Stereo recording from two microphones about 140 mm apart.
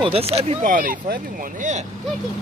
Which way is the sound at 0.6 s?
75° right (ahead or behind).